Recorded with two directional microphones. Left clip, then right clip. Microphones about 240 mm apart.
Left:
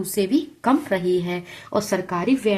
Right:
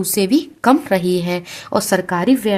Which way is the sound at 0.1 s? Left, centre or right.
Right.